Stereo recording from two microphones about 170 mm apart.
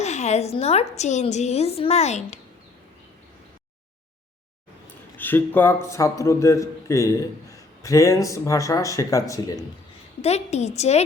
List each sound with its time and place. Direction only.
0.0 s a woman's voice: 40° left (ahead or behind)
5.1 s a man's voice: 10° left (ahead or behind)
10.2 s a woman's voice: 40° left (ahead or behind)